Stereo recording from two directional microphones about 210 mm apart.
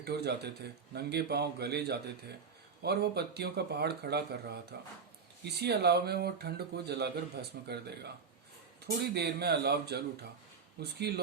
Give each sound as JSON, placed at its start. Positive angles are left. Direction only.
{"t": 0.0, "sound": "speech", "side_deg": -50}